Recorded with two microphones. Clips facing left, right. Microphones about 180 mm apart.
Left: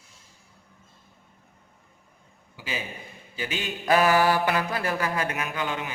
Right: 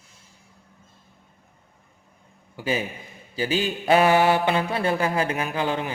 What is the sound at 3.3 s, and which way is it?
Mantra, 35° right (ahead or behind).